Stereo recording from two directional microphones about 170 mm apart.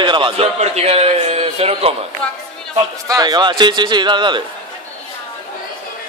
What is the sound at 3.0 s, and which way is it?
Speech, 20° right (ahead or behind).